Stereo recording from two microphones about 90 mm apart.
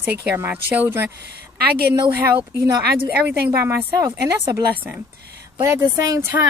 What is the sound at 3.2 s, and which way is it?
Speech, 20° right (ahead or behind).